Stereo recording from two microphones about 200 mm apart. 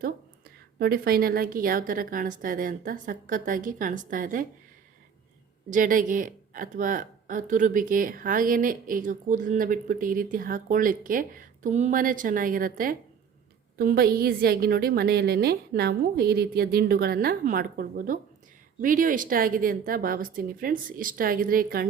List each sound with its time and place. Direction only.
0.8 s speech: 50° right (ahead or behind)
5.7 s speech: 40° right (ahead or behind)